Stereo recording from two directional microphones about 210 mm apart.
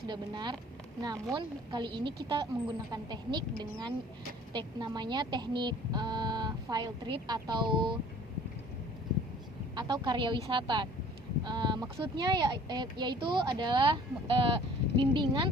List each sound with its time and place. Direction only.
0.1 s speech: 20° right (ahead or behind)
9.7 s speech: 20° right (ahead or behind)